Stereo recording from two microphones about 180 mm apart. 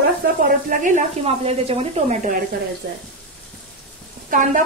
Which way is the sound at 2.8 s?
60° right (ahead or behind).